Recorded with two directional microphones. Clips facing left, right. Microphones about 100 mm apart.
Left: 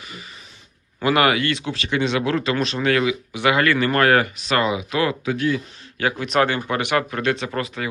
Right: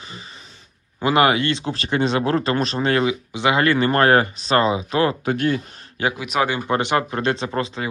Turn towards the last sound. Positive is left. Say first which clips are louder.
# right 2 dB
turn(degrees=-25)  # may be behind; listen again after turning